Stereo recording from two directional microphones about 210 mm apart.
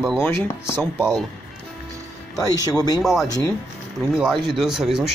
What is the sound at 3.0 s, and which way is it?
Speech, centre (ahead or behind).